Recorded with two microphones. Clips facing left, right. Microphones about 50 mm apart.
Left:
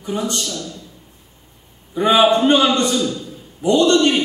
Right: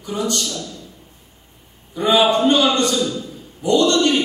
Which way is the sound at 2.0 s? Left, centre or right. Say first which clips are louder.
Left 2 dB; left.